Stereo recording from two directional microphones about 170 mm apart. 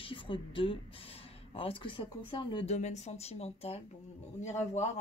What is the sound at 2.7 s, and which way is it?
Speech, 40° left (ahead or behind).